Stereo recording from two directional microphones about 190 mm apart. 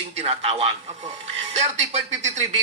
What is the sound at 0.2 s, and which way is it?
Speech, 30° right (ahead or behind).